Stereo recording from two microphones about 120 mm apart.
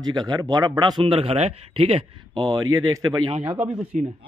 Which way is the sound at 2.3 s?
30° right (ahead or behind).